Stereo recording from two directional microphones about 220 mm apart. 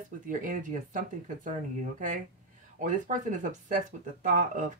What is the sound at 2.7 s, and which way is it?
Speech, 35° right (ahead or behind).